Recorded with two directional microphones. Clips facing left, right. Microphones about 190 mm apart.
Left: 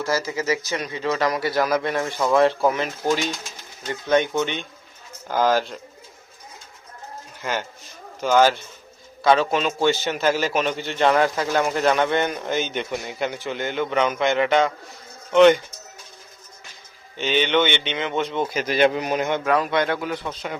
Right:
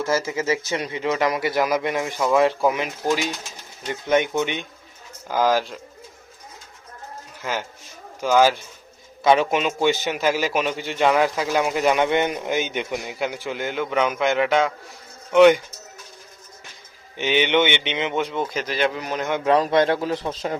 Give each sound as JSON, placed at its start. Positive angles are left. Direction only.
{"t": 0.0, "sound": "a man's voice", "side_deg": -20}
{"t": 3.8, "sound": "a man's voice", "side_deg": -20}
{"t": 8.2, "sound": "a man's voice", "side_deg": -5}
{"t": 9.2, "sound": "a man's voice", "side_deg": -20}
{"t": 17.2, "sound": "a man's voice", "side_deg": -15}
{"t": 18.4, "sound": "speech", "side_deg": 10}
{"t": 19.5, "sound": "a man's voice", "side_deg": -30}